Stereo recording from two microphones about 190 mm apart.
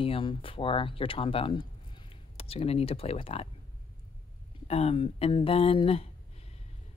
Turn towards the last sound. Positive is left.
turn(degrees=30)  # may be behind; listen again after turning